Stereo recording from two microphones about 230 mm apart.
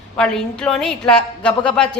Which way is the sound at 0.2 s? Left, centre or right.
Centre.